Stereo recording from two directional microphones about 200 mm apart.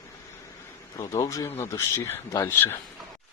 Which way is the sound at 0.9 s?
20° left (ahead or behind).